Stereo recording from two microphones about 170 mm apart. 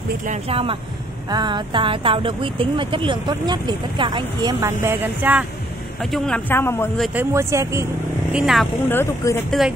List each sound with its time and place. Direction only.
0.3 s speech: 35° right (ahead or behind); by 5.4 s 10° right (ahead or behind)
6.1 s speech: 5° left (ahead or behind)
7.2 s speech: 15° right (ahead or behind)
8.3 s speech: 5° right (ahead or behind)
8.8 s speech: 15° left (ahead or behind)
9.6 s speech: centre (ahead or behind)